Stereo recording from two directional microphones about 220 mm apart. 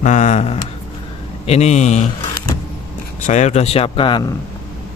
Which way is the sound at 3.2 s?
35° left (ahead or behind).